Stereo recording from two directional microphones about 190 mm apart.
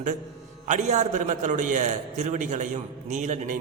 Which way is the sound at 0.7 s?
40° right (ahead or behind).